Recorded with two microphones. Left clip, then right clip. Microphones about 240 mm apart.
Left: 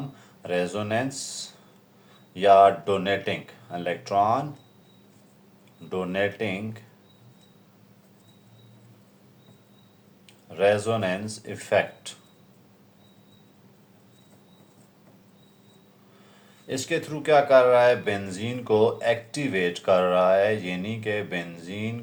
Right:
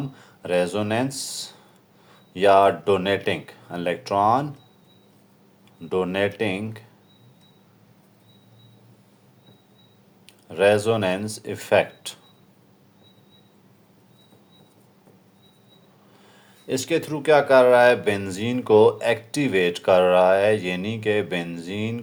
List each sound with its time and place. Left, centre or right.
0.2 s speech: right
5.9 s speech: right
10.5 s speech: right
16.6 s speech: right